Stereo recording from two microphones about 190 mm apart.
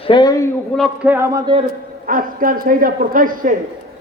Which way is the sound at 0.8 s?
10° right (ahead or behind).